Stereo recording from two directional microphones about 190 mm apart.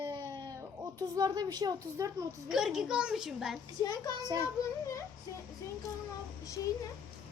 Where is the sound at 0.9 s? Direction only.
20° right (ahead or behind).